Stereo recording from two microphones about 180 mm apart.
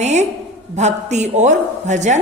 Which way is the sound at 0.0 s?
40° right (ahead or behind).